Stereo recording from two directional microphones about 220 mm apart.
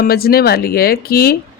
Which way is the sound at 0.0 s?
45° left (ahead or behind).